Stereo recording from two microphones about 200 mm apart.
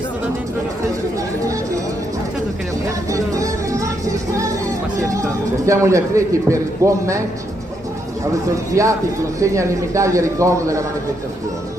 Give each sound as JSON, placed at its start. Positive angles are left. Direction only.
{"t": 3.1, "sound": "music", "side_deg": -15}
{"t": 5.6, "sound": "a man's voice", "side_deg": -15}
{"t": 8.7, "sound": "a man's voice", "side_deg": -15}